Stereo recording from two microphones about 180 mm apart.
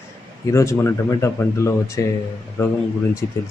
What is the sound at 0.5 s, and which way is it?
A man's voice, 15° left (ahead or behind).